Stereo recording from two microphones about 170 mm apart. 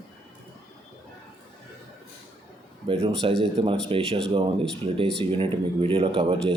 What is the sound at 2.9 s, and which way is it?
Speech, 35° right (ahead or behind).